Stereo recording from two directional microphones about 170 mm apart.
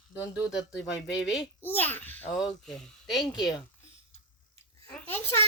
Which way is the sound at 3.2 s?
25° left (ahead or behind).